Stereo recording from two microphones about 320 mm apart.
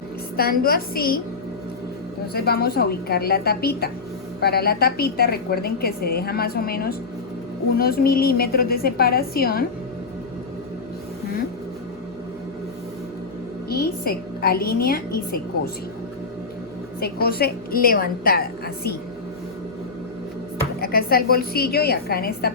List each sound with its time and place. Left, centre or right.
0.3 s a woman's voice: left
2.3 s a woman's voice: left
13.7 s a woman's voice: left
17.0 s a woman's voice: left
20.8 s a woman's voice: left